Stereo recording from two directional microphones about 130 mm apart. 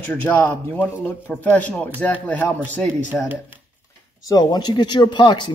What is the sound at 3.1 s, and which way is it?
Speech, 15° right (ahead or behind).